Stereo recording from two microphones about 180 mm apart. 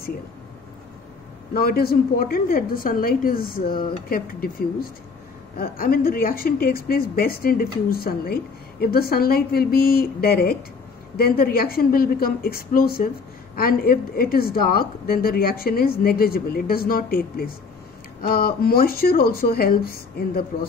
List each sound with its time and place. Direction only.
1.5 s speech: 60° left (ahead or behind)